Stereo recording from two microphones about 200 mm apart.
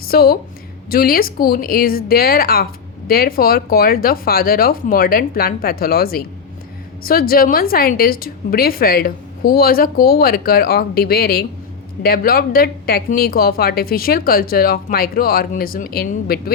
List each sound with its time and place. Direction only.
0.1 s a woman's voice: 50° left (ahead or behind)